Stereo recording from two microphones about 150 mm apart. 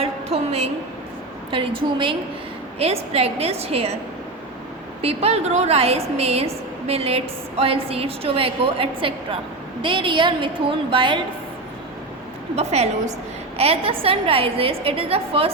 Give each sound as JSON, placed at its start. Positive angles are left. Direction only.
{"t": 0.0, "sound": "a sound", "side_deg": -45}
{"t": 1.5, "sound": "a woman's voice", "side_deg": -35}
{"t": 5.0, "sound": "a woman's voice", "side_deg": -45}
{"t": 12.5, "sound": "a woman's voice", "side_deg": -45}